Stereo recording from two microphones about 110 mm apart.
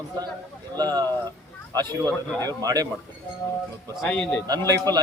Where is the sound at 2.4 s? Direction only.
35° right (ahead or behind).